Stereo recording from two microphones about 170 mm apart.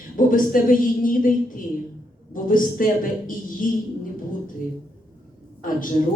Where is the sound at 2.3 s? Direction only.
55° left (ahead or behind).